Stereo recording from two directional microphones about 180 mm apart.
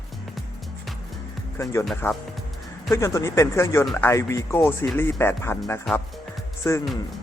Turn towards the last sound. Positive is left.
turn(degrees=15)  # may be behind; listen again after turning